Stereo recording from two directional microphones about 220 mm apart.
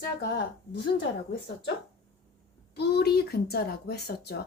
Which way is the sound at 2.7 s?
50° left (ahead or behind).